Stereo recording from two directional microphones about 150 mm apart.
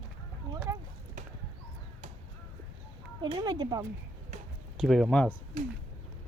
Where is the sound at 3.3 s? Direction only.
30° right (ahead or behind).